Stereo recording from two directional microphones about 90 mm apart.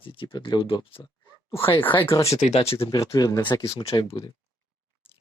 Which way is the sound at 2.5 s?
90° left.